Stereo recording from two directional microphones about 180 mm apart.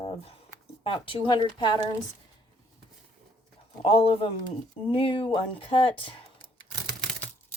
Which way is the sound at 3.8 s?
30° left (ahead or behind).